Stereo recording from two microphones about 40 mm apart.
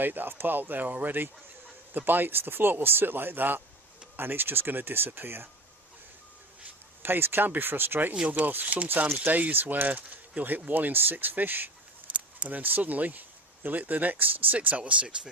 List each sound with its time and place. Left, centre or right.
0.0 s speech: right
7.0 s speech: right
8.4 s speech: right
12.4 s speech: right